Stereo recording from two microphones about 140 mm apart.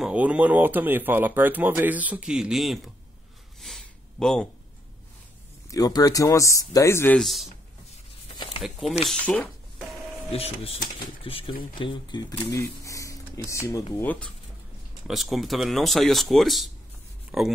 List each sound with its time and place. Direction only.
0.0 s speech: 10° right (ahead or behind)
3.6 s a sound: 5° left (ahead or behind)
5.7 s speech: 25° left (ahead or behind)
7.2 s speech: centre (ahead or behind)
7.9 s a sound: 40° left (ahead or behind)
8.6 s speech: centre (ahead or behind)
9.1 s speech: 10° left (ahead or behind)
10.3 s speech: 45° left (ahead or behind); by 13.8 s 25° left (ahead or behind)
13.9 s speech: 10° left (ahead or behind)
15.0 s speech: centre (ahead or behind)